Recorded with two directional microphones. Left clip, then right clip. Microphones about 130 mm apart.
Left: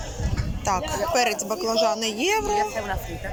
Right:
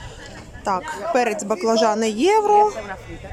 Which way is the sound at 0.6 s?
30° right (ahead or behind).